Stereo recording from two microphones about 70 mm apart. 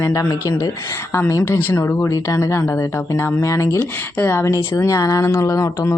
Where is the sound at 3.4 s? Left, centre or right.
Left.